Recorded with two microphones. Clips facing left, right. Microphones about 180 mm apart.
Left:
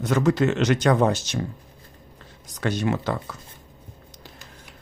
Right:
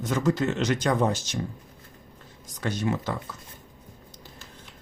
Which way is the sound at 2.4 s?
70° left (ahead or behind).